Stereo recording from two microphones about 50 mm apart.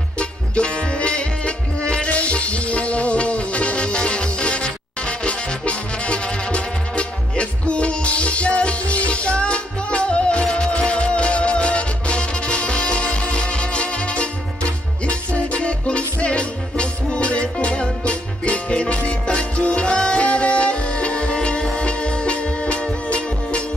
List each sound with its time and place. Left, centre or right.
0.2 s music: left